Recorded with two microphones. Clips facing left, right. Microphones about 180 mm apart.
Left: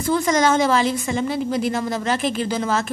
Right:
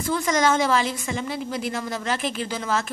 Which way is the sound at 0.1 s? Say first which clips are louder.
Left 4 dB; 35° left (ahead or behind).